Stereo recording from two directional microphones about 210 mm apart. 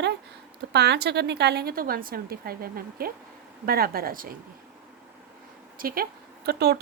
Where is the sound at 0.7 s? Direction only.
50° right (ahead or behind).